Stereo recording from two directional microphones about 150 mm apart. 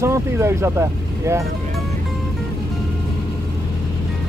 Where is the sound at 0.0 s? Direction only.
15° right (ahead or behind).